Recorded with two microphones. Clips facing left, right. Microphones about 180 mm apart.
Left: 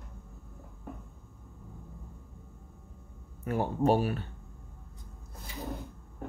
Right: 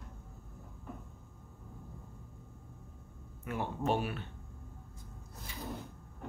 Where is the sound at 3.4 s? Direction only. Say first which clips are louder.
Left 7 dB; 40° left (ahead or behind).